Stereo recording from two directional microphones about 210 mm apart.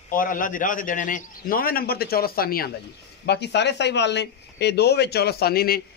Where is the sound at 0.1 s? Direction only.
40° left (ahead or behind).